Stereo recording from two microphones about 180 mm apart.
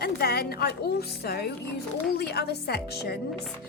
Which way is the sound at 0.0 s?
60° left (ahead or behind).